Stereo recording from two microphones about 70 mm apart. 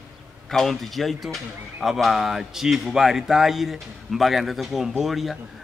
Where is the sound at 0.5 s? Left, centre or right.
Centre.